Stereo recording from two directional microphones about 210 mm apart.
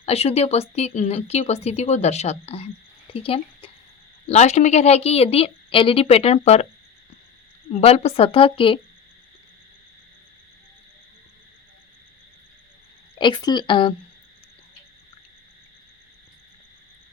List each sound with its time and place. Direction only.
0.0 s a woman's voice: 30° left (ahead or behind)
7.7 s a woman's voice: 30° left (ahead or behind)
13.1 s a woman's voice: 20° left (ahead or behind)